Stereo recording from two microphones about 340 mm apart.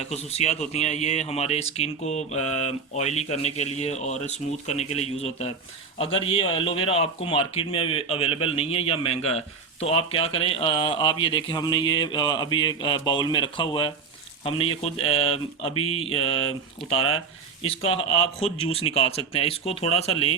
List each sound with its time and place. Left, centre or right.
0.0 s speech: centre